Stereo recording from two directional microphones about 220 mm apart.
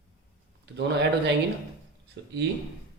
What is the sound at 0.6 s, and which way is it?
A man's voice, 50° right (ahead or behind).